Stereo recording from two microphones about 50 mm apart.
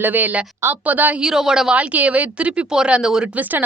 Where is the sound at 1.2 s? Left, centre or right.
Centre.